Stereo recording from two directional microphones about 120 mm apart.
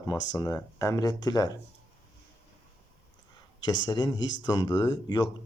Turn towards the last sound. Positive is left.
turn(degrees=35)  # may be behind; listen again after turning